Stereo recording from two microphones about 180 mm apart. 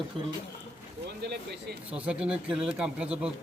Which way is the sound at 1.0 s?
65° right (ahead or behind).